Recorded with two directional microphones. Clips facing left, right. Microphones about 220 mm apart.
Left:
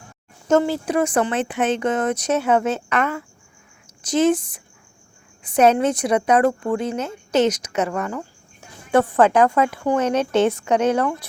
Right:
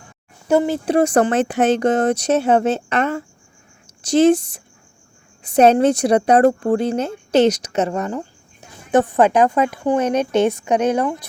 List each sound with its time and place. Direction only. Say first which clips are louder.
0.4 s speech: right 1 dB; 15° right (ahead or behind)
0.9 s a woman's voice: right 6 dB; 40° right (ahead or behind); by 11.3 s 15° right (ahead or behind)